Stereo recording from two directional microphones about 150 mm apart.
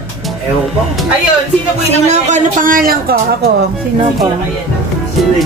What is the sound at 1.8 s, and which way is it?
A man's voice, 50° right (ahead or behind).